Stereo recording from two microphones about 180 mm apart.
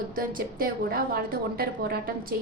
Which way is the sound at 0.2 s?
55° right (ahead or behind).